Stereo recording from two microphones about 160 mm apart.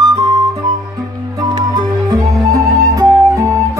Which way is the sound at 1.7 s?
25° right (ahead or behind).